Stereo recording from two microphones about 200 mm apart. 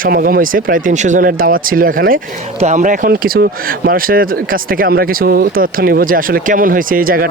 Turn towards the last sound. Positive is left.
turn(degrees=-45)  # may be behind; listen again after turning